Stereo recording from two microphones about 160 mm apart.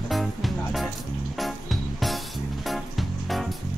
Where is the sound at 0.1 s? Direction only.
Centre (ahead or behind).